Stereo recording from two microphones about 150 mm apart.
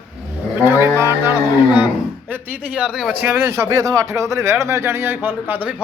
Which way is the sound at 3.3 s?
15° right (ahead or behind).